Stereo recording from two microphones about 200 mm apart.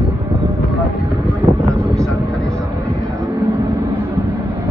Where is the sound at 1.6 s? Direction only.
15° right (ahead or behind).